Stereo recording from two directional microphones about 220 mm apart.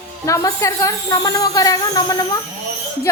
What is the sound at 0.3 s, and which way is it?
Speech, 15° left (ahead or behind).